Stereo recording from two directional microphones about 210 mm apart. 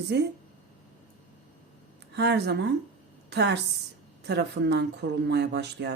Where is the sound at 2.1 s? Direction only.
55° right (ahead or behind).